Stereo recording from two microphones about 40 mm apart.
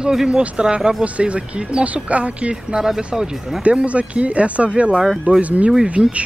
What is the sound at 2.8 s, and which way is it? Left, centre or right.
Speech, centre.